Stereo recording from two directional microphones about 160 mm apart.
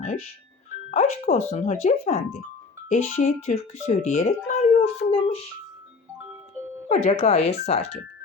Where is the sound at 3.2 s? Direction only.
45° left (ahead or behind).